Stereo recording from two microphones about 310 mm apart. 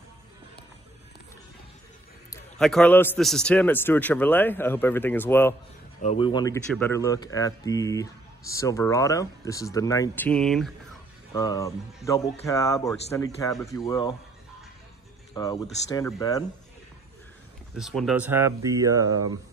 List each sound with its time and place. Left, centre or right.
2.3 s a man's voice: centre
15.3 s speech: centre
17.7 s speech: centre